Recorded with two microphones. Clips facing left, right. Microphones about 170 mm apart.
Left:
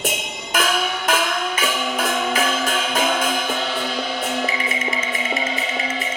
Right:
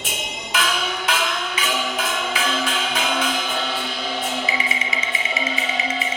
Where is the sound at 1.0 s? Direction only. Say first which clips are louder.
Left 3 dB; 45° left (ahead or behind).